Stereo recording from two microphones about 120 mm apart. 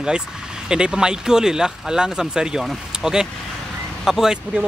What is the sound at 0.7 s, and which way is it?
Speech, 5° right (ahead or behind).